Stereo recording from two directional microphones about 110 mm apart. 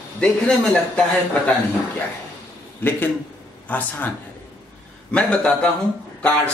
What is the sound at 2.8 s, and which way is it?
Speech, 15° left (ahead or behind).